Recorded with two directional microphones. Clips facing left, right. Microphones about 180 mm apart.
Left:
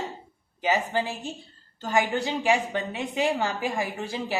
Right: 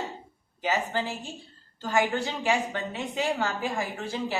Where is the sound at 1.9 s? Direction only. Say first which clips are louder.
Left 1 dB; 20° left (ahead or behind).